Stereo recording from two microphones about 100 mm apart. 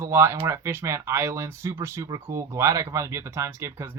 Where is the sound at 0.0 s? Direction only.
25° right (ahead or behind).